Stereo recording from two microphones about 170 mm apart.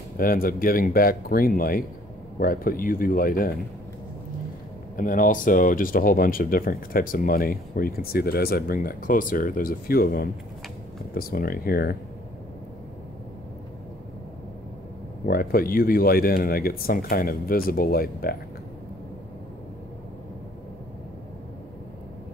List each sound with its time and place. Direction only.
0.2 s speech: 55° left (ahead or behind)
4.9 s speech: 50° left (ahead or behind)
15.2 s speech: 60° left (ahead or behind)